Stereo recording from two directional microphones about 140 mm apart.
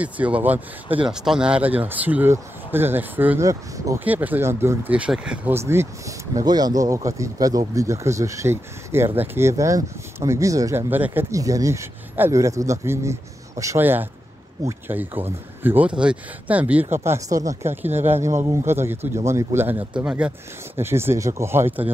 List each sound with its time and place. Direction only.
0.0 s speech: 10° right (ahead or behind)
4.0 s speech: 10° right (ahead or behind)
10.9 s speech: 15° right (ahead or behind)